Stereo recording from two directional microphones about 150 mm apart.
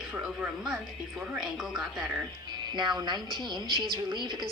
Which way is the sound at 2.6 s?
30° right (ahead or behind).